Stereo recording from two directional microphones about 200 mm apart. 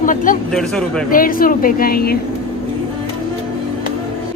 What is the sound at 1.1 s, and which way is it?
Speech, 45° left (ahead or behind).